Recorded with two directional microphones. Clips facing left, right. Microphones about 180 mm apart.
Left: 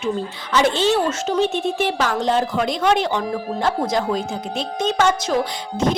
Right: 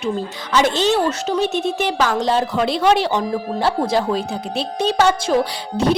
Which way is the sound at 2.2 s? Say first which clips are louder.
Right 1 dB; 35° right (ahead or behind).